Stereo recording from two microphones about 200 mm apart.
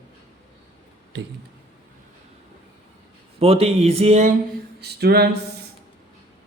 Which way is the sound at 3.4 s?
30° right (ahead or behind).